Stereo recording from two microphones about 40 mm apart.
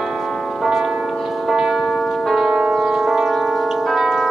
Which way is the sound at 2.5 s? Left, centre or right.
Centre.